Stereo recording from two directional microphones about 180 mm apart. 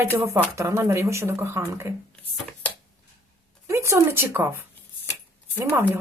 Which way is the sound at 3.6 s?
15° right (ahead or behind).